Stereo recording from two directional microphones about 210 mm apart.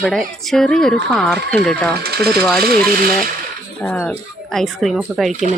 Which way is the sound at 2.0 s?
50° right (ahead or behind).